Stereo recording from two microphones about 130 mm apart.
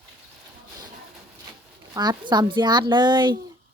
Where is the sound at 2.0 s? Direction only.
35° right (ahead or behind).